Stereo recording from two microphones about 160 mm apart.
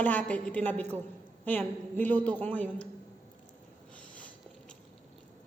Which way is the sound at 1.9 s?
10° left (ahead or behind).